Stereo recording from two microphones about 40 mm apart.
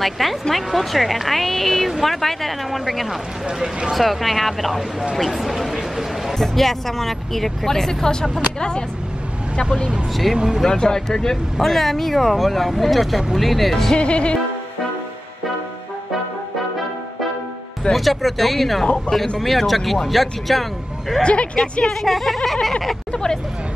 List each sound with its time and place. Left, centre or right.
0.0 s a woman's voice: centre
5.1 s a sound: centre
6.3 s speech: centre
8.5 s music: left
10.3 s speech: centre
10.7 s a woman's voice: centre
13.9 s music: left
17.9 s a woman's voice: centre
21.2 s music: left
21.8 s a woman's voice: centre